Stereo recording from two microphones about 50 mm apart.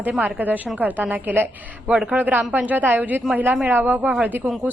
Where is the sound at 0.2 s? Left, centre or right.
Right.